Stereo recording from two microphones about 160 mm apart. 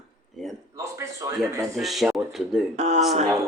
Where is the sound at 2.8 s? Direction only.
45° right (ahead or behind).